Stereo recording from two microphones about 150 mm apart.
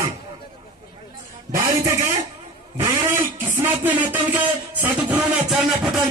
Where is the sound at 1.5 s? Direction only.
20° right (ahead or behind).